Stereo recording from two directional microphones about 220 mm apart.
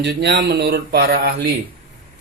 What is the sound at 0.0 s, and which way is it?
Speech, 50° right (ahead or behind).